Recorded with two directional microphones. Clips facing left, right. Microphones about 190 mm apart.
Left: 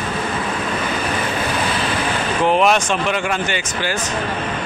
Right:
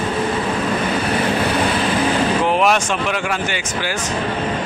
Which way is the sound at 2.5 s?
5° right (ahead or behind).